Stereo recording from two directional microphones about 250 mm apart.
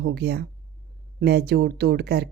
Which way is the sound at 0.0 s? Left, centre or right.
Right.